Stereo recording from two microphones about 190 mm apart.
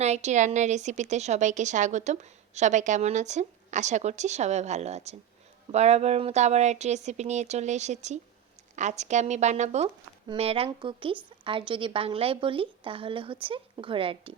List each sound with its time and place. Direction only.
0.0 s a woman's voice: 35° right (ahead or behind)